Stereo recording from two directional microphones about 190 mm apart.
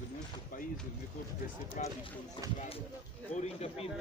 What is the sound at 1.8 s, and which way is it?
Speech, 40° left (ahead or behind).